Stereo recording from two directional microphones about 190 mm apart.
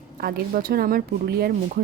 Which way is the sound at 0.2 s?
55° right (ahead or behind).